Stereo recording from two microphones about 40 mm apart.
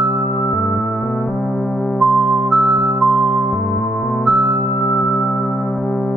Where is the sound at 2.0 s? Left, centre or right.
Centre.